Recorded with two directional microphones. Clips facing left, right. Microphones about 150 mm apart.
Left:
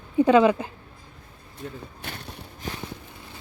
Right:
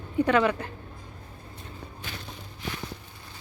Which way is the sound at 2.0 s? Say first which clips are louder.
Left 1 dB; 60° left (ahead or behind).